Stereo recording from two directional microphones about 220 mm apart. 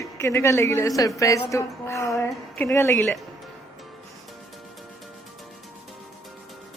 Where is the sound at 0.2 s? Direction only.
10° left (ahead or behind).